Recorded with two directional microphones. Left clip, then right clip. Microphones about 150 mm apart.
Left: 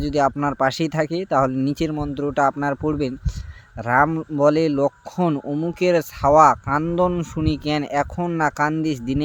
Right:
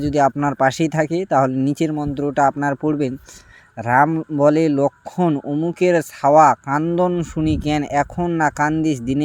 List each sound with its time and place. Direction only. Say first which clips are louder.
0.0 s speech: right 3 dB; 20° right (ahead or behind)